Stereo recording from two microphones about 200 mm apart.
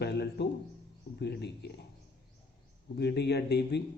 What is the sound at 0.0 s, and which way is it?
Speech, 55° left (ahead or behind).